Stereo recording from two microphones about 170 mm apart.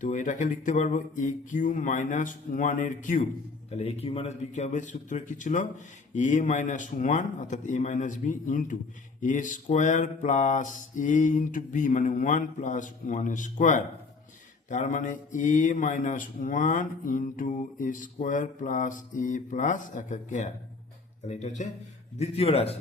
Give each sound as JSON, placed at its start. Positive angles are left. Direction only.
{"t": 0.0, "sound": "speech", "side_deg": 50}
{"t": 3.7, "sound": "a man's voice", "side_deg": 35}